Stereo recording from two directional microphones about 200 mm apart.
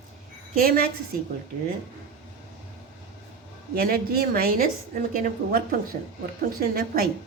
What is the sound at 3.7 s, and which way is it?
A woman's voice, 50° right (ahead or behind).